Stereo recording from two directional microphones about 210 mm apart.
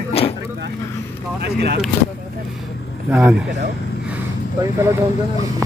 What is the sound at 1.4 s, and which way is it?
Speech, 50° right (ahead or behind).